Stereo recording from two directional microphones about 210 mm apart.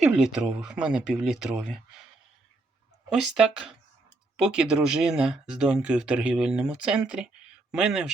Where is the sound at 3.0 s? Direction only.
Centre (ahead or behind).